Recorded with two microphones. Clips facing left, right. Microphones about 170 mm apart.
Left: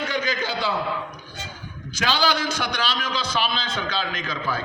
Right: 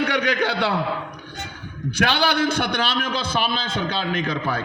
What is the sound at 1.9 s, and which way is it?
A man's voice, 60° right (ahead or behind).